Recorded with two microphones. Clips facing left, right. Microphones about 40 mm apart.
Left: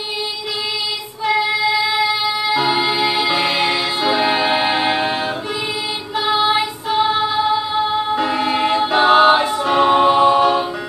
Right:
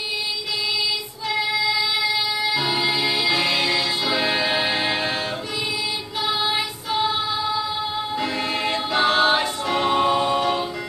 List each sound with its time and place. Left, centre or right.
1.2 s child singing: left
2.5 s music: left
6.1 s child singing: left
7.1 s music: left
8.2 s choir: left